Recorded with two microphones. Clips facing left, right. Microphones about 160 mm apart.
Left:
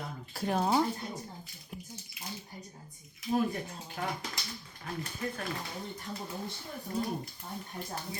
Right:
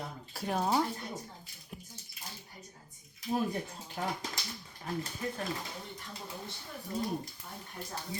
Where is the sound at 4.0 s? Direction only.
20° right (ahead or behind).